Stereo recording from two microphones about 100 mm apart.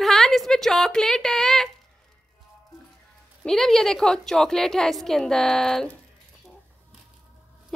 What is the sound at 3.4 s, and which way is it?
A woman's voice, 5° left (ahead or behind).